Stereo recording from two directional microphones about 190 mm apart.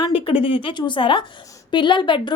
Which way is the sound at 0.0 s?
30° left (ahead or behind).